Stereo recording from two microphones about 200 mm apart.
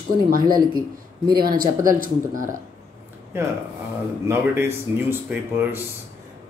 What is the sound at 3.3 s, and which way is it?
Speech, 10° right (ahead or behind).